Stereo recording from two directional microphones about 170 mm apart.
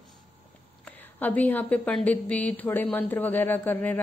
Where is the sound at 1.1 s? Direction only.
10° left (ahead or behind).